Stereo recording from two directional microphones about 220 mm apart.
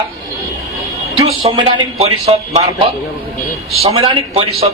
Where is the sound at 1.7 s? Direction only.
30° right (ahead or behind).